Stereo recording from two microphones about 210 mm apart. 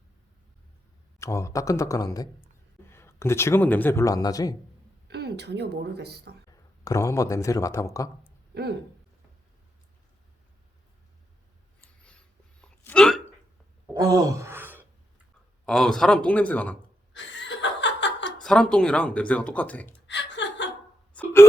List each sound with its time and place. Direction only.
1.2 s speech: 15° left (ahead or behind)
5.0 s a woman's voice: 50° right (ahead or behind)
6.8 s speech: 15° left (ahead or behind)
12.6 s hiccup: 5° left (ahead or behind)
13.9 s gasp: 20° right (ahead or behind)
15.6 s speech: centre (ahead or behind)
17.2 s laughter: 60° left (ahead or behind)
18.4 s speech: 5° left (ahead or behind)
20.1 s chuckle: 60° left (ahead or behind)
21.1 s hiccup: 5° left (ahead or behind)